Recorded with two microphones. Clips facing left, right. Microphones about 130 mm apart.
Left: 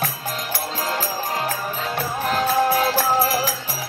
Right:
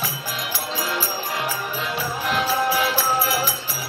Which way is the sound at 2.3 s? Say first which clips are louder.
Left 3 dB; 40° left (ahead or behind).